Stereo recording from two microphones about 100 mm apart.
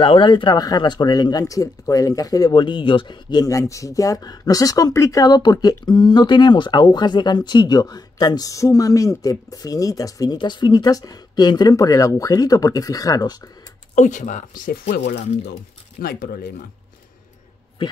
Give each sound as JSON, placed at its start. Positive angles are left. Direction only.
{"t": 0.0, "sound": "speech", "side_deg": 55}
{"t": 2.5, "sound": "speech", "side_deg": 55}
{"t": 10.3, "sound": "speech", "side_deg": 50}